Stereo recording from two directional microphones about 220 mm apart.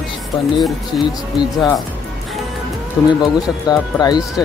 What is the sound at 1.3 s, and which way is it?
Speech, 20° left (ahead or behind).